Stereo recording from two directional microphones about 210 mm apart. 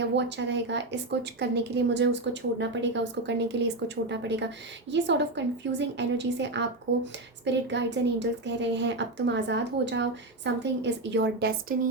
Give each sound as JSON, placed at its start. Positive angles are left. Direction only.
{"t": 0.0, "sound": "a woman's voice", "side_deg": -55}